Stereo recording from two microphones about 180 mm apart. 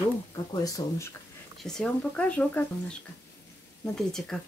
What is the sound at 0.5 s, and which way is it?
Speech, 20° left (ahead or behind).